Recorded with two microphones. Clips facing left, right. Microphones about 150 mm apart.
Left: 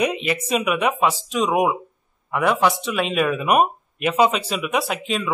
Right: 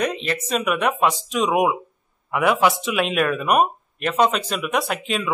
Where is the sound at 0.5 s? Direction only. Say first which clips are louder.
Even; 5° left (ahead or behind).